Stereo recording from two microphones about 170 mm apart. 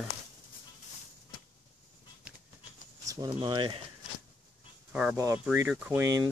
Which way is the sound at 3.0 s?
20° right (ahead or behind).